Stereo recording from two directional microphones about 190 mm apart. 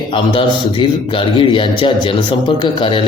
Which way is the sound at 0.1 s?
25° left (ahead or behind).